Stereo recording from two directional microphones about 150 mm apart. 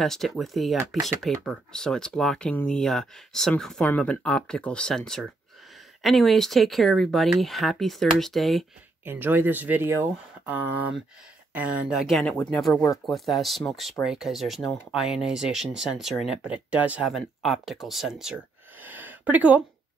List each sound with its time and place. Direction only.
0.0 s speech: centre (ahead or behind)
9.0 s speech: 15° right (ahead or behind)